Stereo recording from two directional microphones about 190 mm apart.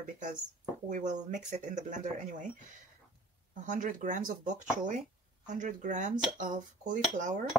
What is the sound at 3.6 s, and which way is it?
Speech, 45° right (ahead or behind).